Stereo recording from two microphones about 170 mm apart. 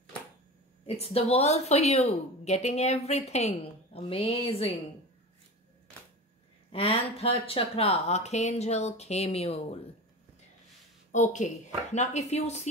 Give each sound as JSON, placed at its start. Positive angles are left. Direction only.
{"t": 0.8, "sound": "a woman's voice", "side_deg": 35}
{"t": 6.7, "sound": "a woman's voice", "side_deg": 35}
{"t": 11.1, "sound": "a woman's voice", "side_deg": 45}